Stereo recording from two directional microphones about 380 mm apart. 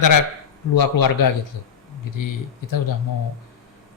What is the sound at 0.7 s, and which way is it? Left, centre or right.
Speech, left.